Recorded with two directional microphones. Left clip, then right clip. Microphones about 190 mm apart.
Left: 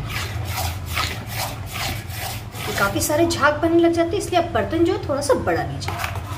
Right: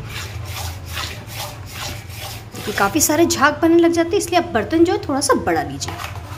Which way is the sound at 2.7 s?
55° right (ahead or behind).